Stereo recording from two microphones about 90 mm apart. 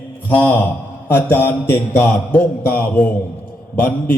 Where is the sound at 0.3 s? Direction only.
20° left (ahead or behind).